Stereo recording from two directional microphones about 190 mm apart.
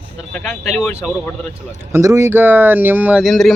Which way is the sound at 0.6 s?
5° right (ahead or behind).